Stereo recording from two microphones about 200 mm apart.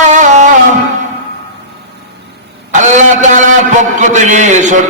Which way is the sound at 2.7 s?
35° right (ahead or behind).